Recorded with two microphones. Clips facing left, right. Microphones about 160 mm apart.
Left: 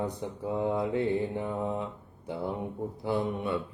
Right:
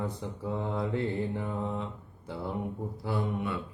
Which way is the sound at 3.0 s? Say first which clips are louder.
Left 2 dB; 20° left (ahead or behind).